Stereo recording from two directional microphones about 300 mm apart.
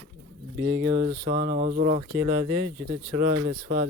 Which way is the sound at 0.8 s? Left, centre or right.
Centre.